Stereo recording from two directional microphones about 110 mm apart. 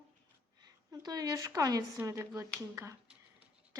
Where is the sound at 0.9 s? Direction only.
35° right (ahead or behind).